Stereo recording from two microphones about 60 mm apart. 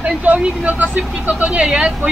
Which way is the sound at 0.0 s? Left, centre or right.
Right.